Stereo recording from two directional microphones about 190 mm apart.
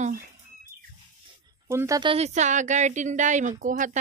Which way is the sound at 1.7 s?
15° right (ahead or behind).